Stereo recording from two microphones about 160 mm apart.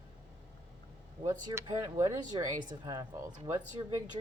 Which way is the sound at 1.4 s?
25° right (ahead or behind).